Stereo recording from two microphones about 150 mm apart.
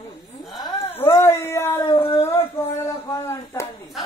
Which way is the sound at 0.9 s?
15° left (ahead or behind).